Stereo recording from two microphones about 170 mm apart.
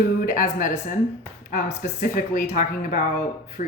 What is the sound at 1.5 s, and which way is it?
Speech, 55° left (ahead or behind).